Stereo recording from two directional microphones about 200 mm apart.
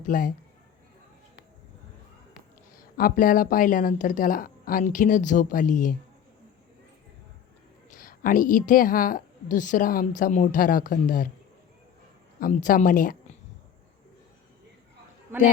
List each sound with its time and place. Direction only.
0.1 s a man's voice: 40° left (ahead or behind)
2.7 s speech: 45° left (ahead or behind)
7.9 s a woman's voice: 45° left (ahead or behind)
12.4 s speech: 40° left (ahead or behind)